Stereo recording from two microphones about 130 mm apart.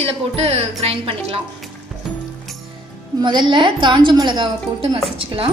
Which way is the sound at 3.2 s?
35° right (ahead or behind).